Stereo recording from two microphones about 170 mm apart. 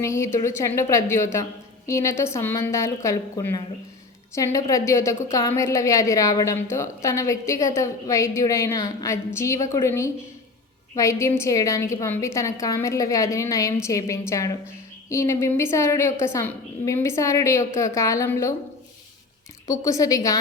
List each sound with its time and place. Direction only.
0.0 s a woman's voice: 15° left (ahead or behind)
19.6 s a woman's voice: 20° left (ahead or behind)